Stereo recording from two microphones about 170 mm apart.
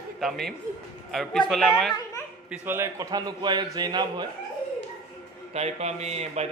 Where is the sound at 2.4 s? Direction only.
15° right (ahead or behind).